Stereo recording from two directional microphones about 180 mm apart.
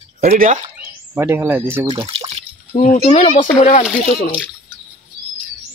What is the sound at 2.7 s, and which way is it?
Speech, 40° left (ahead or behind).